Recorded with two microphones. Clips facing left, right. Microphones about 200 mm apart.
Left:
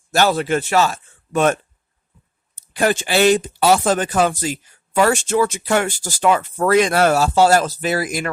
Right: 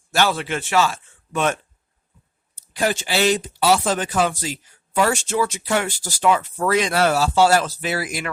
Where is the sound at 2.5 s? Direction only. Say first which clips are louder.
Left 4 dB; 55° left (ahead or behind).